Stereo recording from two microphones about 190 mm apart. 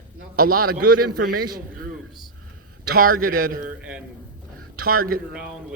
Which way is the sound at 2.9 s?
50° right (ahead or behind).